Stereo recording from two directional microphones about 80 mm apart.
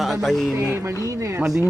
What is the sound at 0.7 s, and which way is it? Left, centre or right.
Speech, right.